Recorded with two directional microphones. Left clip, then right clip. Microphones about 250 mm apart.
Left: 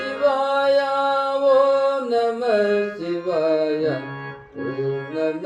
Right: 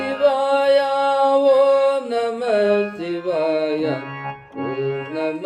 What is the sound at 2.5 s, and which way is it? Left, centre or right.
Music, right.